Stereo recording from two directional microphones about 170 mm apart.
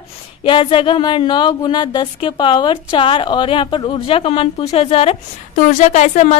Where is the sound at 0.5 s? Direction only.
30° left (ahead or behind).